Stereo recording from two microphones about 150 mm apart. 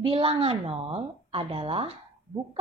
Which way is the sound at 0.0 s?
35° right (ahead or behind).